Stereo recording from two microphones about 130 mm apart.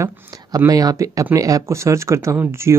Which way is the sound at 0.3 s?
30° right (ahead or behind).